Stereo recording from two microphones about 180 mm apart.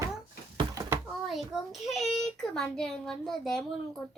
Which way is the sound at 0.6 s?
20° right (ahead or behind).